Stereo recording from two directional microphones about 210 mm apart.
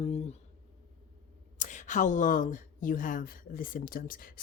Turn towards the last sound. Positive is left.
turn(degrees=40)  # may be behind; listen again after turning